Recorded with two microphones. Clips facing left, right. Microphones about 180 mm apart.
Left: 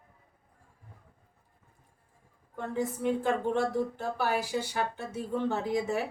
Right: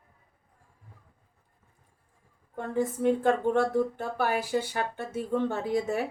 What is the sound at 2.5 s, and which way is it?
Speech, 50° right (ahead or behind).